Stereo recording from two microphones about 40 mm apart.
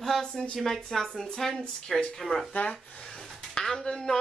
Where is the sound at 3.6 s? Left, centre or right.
Centre.